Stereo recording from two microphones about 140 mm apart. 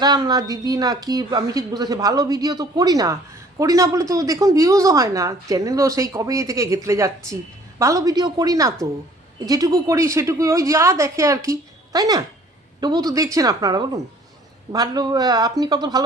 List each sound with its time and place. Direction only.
0.0 s speech: 30° right (ahead or behind)